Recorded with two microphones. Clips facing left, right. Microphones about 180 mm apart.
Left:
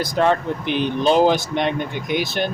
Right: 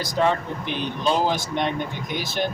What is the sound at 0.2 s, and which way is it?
Speech, 70° left (ahead or behind).